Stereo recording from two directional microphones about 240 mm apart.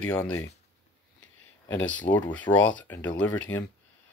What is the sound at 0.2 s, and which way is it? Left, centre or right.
Speech, centre.